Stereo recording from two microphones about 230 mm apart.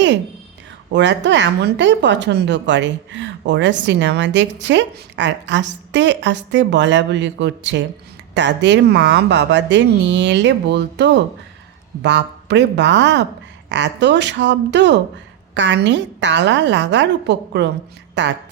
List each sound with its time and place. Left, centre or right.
0.9 s a woman's voice: right